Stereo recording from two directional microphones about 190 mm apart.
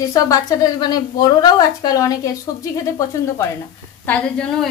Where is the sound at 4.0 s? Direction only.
5° left (ahead or behind).